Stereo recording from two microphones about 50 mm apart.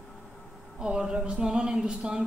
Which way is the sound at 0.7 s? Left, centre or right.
Centre.